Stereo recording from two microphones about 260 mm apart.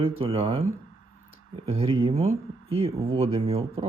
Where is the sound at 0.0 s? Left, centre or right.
Right.